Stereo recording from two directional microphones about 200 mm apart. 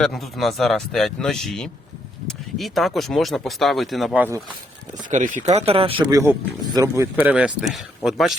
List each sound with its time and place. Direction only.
0.0 s speech: centre (ahead or behind)
5.1 s speech: 40° right (ahead or behind); by 8.3 s centre (ahead or behind)